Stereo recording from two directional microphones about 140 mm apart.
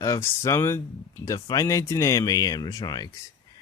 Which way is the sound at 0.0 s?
20° left (ahead or behind).